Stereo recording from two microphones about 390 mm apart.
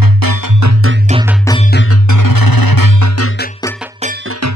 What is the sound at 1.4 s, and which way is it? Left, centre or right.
Music, centre.